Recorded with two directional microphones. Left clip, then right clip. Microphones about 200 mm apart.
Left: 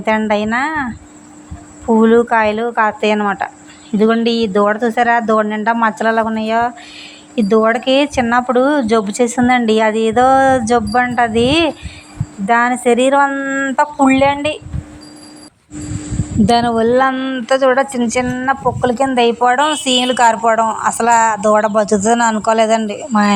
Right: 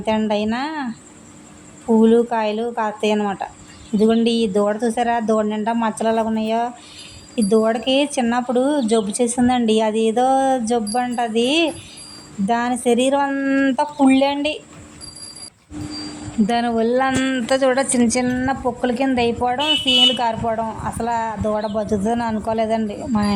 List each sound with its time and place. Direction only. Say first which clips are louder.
0.0 s speech: left 5 dB; 10° left (ahead or behind)
2.0 s speech: left 5 dB; 5° left (ahead or behind)
16.5 s speech: left 8 dB; 20° left (ahead or behind)
16.7 s speech: left 5 dB; 5° left (ahead or behind)
18.8 s speech: left 6 dB; 10° left (ahead or behind)
19.0 s speech: left 8 dB; centre (ahead or behind)